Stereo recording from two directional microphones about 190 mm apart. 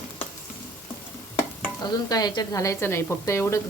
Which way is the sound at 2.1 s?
20° left (ahead or behind).